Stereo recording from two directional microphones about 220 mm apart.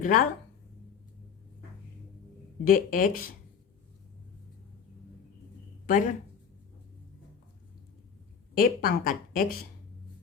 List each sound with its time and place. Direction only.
0.0 s a woman's voice: 40° left (ahead or behind)
2.6 s a woman's voice: 40° left (ahead or behind)
5.8 s speech: 35° left (ahead or behind)
8.5 s a woman's voice: 40° left (ahead or behind)